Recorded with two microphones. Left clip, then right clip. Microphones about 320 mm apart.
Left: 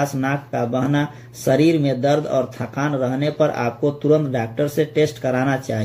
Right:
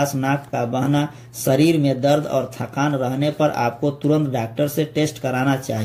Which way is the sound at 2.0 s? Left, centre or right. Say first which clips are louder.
Even; right.